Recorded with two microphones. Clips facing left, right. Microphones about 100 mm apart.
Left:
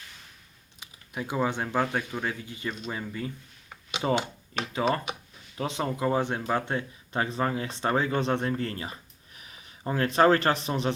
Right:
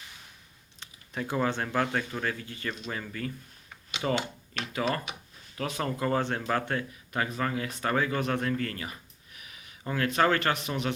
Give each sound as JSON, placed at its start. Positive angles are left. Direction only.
{"t": 0.8, "sound": "speech", "side_deg": 10}